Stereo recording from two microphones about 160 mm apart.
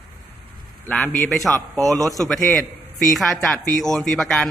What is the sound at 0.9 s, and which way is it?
A man's voice, 10° left (ahead or behind).